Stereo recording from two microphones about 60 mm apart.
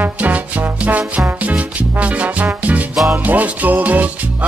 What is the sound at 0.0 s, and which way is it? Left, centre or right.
Music, right.